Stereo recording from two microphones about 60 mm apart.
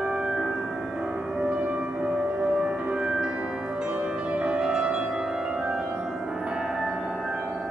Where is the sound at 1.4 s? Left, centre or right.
Centre.